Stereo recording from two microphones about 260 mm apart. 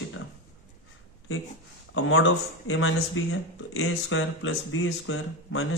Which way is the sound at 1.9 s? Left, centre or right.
Left.